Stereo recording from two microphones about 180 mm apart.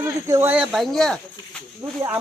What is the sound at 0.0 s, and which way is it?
Speech, 15° right (ahead or behind).